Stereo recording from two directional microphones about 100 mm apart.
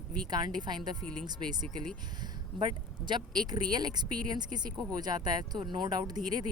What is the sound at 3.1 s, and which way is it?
Speech, 45° right (ahead or behind).